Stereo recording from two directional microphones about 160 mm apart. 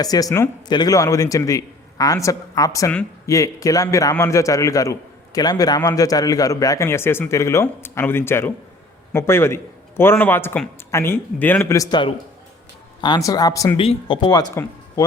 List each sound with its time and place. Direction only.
0.0 s a man's voice: 25° left (ahead or behind)
13.7 s a man's voice: 35° left (ahead or behind)